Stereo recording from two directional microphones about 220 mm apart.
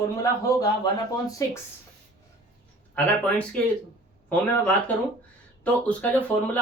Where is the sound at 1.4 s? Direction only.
15° left (ahead or behind).